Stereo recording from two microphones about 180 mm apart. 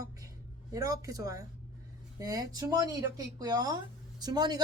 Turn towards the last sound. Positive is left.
turn(degrees=-20)  # may be behind; listen again after turning